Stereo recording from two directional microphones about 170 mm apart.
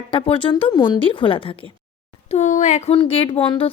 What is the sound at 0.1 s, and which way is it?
Speech, 30° left (ahead or behind).